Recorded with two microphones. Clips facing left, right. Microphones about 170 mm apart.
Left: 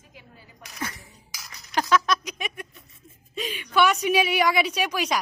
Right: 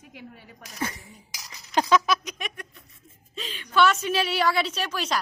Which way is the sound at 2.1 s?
Centre (ahead or behind).